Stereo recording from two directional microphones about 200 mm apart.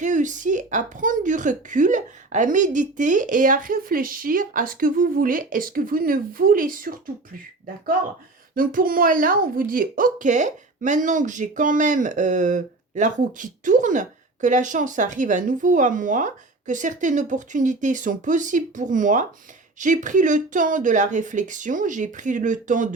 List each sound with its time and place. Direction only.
0.0 s speech: 40° right (ahead or behind)
8.5 s speech: 45° right (ahead or behind)